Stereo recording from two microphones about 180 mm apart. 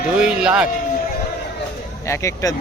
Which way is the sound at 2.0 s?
15° left (ahead or behind).